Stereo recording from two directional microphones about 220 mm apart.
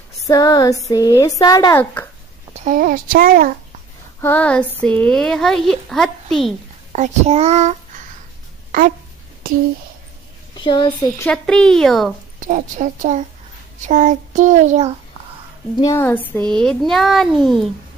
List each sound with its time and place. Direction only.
0.3 s speech: 15° left (ahead or behind)
2.5 s a child's voice: 35° right (ahead or behind)
4.2 s a woman's voice: 10° left (ahead or behind)
6.9 s a child's voice: 30° right (ahead or behind)
10.5 s a child's voice: 20° left (ahead or behind)
11.2 s a woman's voice: 5° left (ahead or behind)
12.4 s a child's voice: 35° right (ahead or behind)
15.8 s a woman's voice: 10° left (ahead or behind)